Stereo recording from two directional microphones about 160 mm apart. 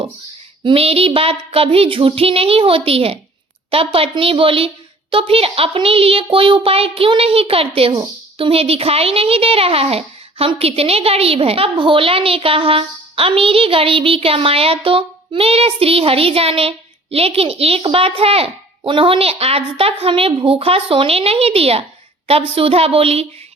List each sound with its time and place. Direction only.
0.6 s speech: 35° right (ahead or behind)